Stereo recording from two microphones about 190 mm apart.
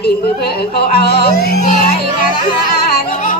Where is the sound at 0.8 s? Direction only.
55° left (ahead or behind).